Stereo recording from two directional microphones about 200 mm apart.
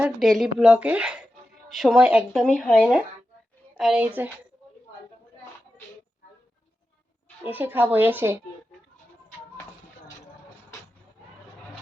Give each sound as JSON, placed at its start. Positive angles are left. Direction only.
{"t": 0.0, "sound": "speech", "side_deg": 0}
{"t": 3.8, "sound": "speech", "side_deg": -5}
{"t": 7.4, "sound": "speech", "side_deg": -10}